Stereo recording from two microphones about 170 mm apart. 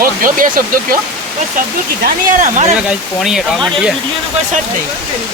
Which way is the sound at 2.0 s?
50° right (ahead or behind).